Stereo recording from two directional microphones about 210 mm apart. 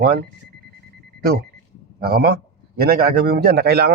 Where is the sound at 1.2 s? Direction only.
45° right (ahead or behind).